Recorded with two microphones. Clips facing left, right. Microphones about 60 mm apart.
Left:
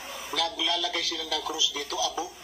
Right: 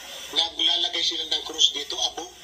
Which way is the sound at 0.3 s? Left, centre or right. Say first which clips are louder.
Even; left.